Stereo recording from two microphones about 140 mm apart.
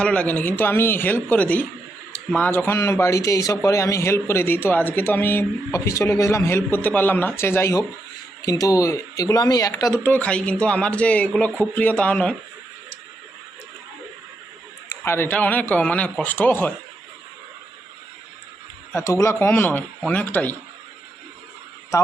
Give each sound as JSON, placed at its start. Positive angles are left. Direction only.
{"t": 0.0, "sound": "speech", "side_deg": 10}
{"t": 15.0, "sound": "speech", "side_deg": 15}
{"t": 18.9, "sound": "speech", "side_deg": 20}
{"t": 21.9, "sound": "speech", "side_deg": 20}